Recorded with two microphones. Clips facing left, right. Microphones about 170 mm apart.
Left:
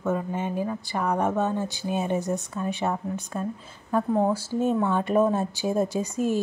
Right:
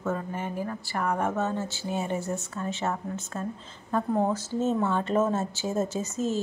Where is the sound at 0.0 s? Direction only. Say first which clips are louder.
Left 4 dB; 15° left (ahead or behind).